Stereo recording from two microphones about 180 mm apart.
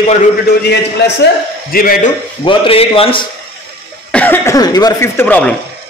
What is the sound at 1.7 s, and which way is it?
Speech, 50° left (ahead or behind).